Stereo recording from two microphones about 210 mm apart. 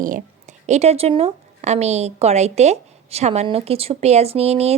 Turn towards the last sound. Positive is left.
turn(degrees=-30)  # may be behind; listen again after turning